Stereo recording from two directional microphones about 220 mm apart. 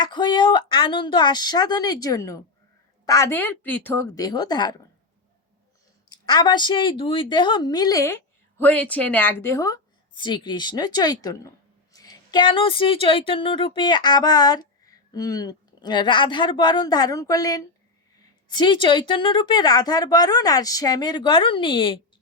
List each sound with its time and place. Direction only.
0.0 s a woman's voice: 20° left (ahead or behind)
6.1 s a woman's voice: 20° left (ahead or behind)